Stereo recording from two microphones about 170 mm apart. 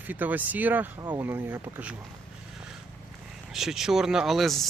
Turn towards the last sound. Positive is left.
turn(degrees=0)  # may be behind; listen again after turning